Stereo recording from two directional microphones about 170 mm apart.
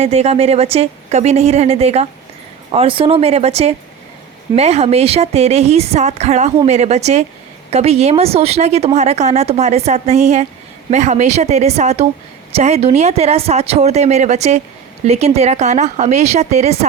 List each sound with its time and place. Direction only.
0.0 s speech: 35° right (ahead or behind)